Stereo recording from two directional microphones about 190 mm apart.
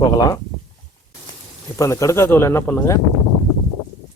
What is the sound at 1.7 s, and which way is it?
Speech, 15° left (ahead or behind).